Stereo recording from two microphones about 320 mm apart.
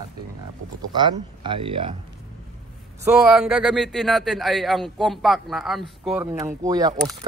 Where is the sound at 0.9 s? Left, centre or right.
Centre.